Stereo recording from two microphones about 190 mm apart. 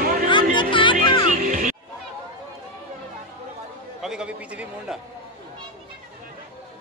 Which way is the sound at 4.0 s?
5° right (ahead or behind).